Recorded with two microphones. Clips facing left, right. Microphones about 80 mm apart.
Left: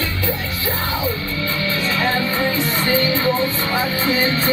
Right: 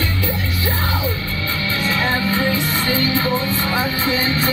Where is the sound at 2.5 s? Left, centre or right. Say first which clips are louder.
Left 1 dB; left.